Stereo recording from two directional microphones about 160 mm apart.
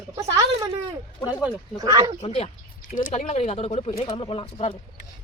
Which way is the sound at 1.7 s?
20° right (ahead or behind).